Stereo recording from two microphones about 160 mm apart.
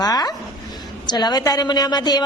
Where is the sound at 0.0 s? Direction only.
25° left (ahead or behind).